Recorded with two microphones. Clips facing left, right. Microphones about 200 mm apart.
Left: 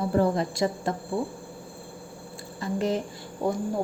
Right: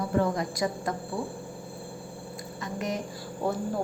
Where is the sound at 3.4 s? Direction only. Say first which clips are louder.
Left 2 dB; 15° left (ahead or behind).